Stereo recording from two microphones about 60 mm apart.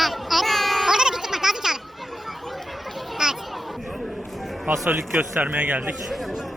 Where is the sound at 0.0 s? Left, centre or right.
Centre.